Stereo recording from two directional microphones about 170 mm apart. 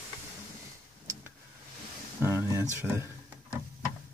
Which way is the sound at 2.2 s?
15° right (ahead or behind).